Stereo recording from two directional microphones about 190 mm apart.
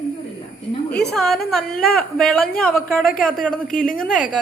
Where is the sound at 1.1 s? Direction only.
Centre (ahead or behind).